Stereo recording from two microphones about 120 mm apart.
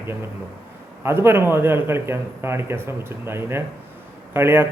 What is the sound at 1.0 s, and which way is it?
A man's voice, 20° right (ahead or behind).